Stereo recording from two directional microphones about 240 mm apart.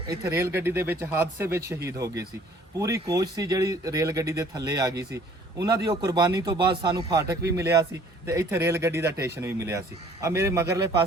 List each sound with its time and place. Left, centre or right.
0.1 s speech: centre